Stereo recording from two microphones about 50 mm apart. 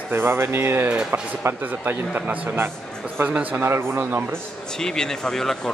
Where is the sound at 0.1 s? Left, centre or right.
Right.